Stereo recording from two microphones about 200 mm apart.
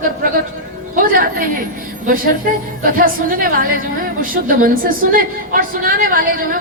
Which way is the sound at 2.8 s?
45° right (ahead or behind).